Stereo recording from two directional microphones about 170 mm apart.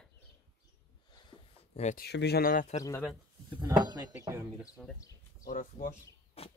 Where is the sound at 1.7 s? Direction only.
40° left (ahead or behind).